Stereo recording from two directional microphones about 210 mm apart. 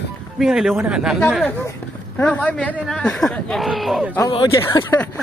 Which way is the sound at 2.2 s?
5° left (ahead or behind).